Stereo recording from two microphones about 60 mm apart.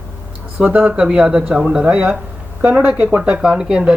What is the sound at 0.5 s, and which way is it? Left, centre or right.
Speech, right.